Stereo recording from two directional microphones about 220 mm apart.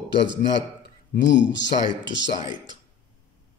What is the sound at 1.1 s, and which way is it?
Speech, 55° left (ahead or behind).